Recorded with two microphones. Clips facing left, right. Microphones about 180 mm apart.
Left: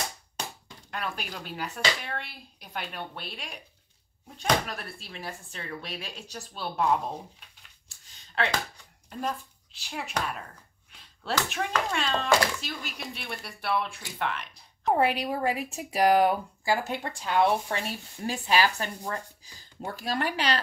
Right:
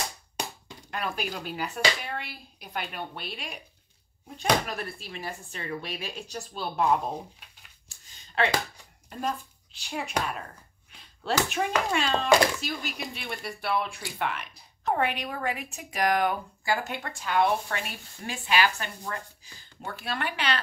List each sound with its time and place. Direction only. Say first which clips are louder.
0.8 s speech: right 3 dB; 5° right (ahead or behind)
8.4 s speech: right 3 dB; centre (ahead or behind)
11.3 s speech: right 2 dB; 5° right (ahead or behind)
15.0 s speech: left 4 dB; 35° left (ahead or behind)